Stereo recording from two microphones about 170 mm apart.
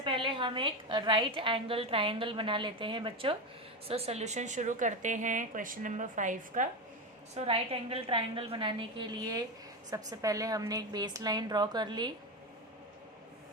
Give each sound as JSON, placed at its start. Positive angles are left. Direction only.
{"t": 0.0, "sound": "a woman's voice", "side_deg": -30}
{"t": 7.3, "sound": "a woman's voice", "side_deg": -35}